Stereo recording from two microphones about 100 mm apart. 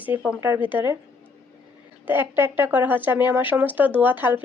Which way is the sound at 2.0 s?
20° right (ahead or behind).